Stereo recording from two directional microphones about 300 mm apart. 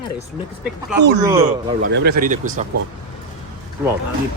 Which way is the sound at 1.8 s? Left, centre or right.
Right.